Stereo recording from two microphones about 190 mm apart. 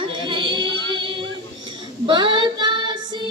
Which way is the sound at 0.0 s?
25° right (ahead or behind).